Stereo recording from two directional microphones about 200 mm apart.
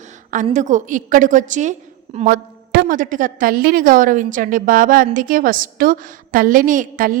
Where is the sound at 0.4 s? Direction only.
35° right (ahead or behind).